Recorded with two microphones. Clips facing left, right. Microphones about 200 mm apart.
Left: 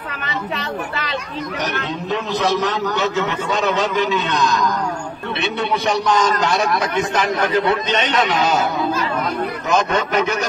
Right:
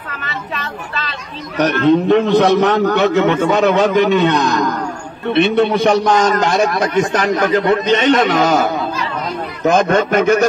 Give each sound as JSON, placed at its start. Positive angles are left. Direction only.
{"t": 0.2, "sound": "speech", "side_deg": 20}
{"t": 1.6, "sound": "a man's voice", "side_deg": -60}
{"t": 9.7, "sound": "a man's voice", "side_deg": -50}